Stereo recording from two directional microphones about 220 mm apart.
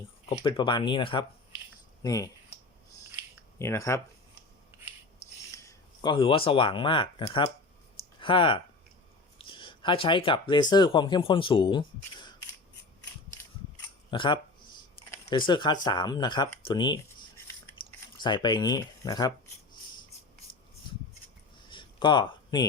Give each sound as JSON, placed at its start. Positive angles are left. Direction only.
{"t": 0.3, "sound": "speech", "side_deg": 25}
{"t": 3.6, "sound": "speech", "side_deg": 15}
{"t": 5.5, "sound": "speech", "side_deg": 15}
{"t": 14.1, "sound": "speech", "side_deg": 20}
{"t": 21.7, "sound": "a sound", "side_deg": 20}